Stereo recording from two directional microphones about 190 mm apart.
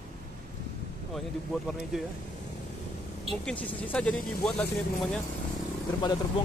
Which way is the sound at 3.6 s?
10° left (ahead or behind).